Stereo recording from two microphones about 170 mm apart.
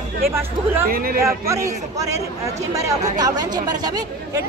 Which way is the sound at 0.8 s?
60° right (ahead or behind).